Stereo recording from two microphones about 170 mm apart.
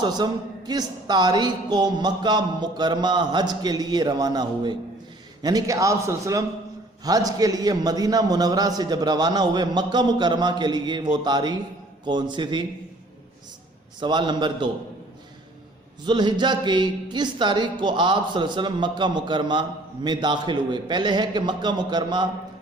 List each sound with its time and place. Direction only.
0.0 s a woman's voice: 25° right (ahead or behind)
14.0 s a woman's voice: 25° right (ahead or behind)
16.0 s a woman's voice: 25° right (ahead or behind)